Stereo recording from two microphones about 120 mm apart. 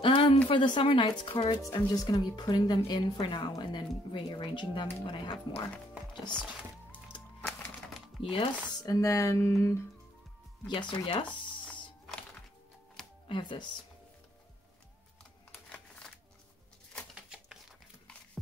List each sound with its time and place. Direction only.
0.0 s a sound: 50° left (ahead or behind)
0.5 s a woman's voice: 45° left (ahead or behind)
1.6 s speech: 30° left (ahead or behind)
3.0 s speech: 45° left (ahead or behind)
8.2 s a woman's voice: 50° left (ahead or behind)
8.8 s speech: 30° left (ahead or behind)
10.7 s a woman's voice: 40° left (ahead or behind)
13.0 s music: 5° left (ahead or behind)
13.3 s speech: 40° left (ahead or behind)
17.1 s a sound: 5° right (ahead or behind)